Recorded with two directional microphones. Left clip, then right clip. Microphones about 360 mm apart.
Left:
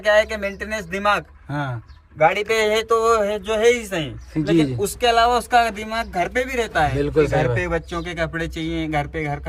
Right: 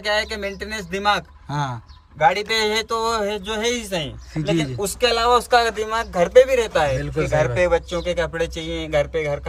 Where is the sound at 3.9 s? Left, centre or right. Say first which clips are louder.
Even; centre.